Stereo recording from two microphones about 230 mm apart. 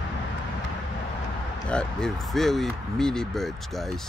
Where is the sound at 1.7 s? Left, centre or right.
Centre.